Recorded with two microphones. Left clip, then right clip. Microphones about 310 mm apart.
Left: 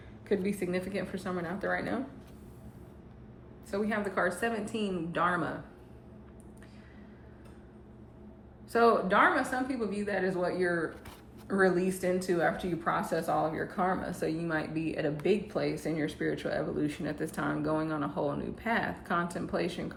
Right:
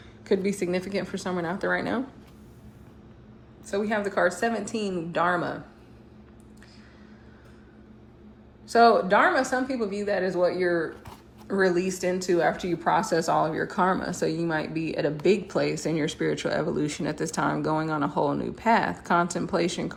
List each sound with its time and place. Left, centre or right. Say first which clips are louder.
0.3 s a woman's voice: right 6 dB; centre
3.7 s a woman's voice: right 6 dB; centre
8.7 s a woman's voice: right 6 dB; centre